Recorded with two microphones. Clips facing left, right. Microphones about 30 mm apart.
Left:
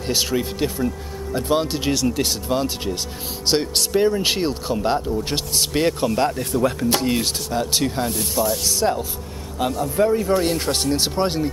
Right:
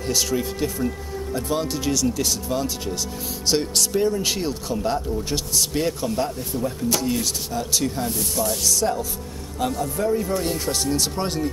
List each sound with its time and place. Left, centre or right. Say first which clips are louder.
0.0 s speech: left 1 dB; left
9.9 s speech: left 7 dB; left
10.5 s speech: left 3 dB; left